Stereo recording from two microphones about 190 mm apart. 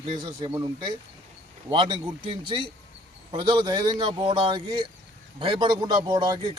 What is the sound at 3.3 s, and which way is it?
Speech, 25° right (ahead or behind).